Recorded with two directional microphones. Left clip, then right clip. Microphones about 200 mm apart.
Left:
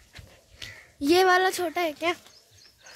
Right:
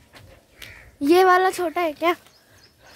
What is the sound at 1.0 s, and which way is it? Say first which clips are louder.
A child's voice: right 5 dB; 20° right (ahead or behind).